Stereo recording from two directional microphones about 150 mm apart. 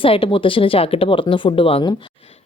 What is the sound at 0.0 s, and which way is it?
Speech, 35° left (ahead or behind).